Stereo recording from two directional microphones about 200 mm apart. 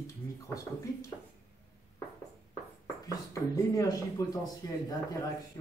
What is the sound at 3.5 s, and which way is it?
Speech, 15° left (ahead or behind).